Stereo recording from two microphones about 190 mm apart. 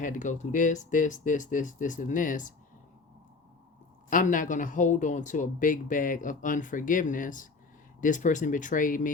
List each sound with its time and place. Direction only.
0.0 s speech: 40° left (ahead or behind)
4.1 s speech: 45° left (ahead or behind)